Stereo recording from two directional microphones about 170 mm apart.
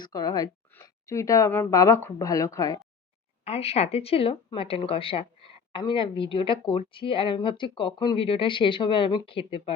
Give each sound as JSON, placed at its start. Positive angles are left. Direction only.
{"t": 0.0, "sound": "a woman's voice", "side_deg": 20}
{"t": 3.4, "sound": "speech", "side_deg": 35}